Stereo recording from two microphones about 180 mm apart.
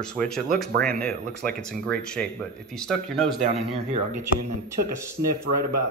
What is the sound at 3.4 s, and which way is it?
Speech, 35° right (ahead or behind).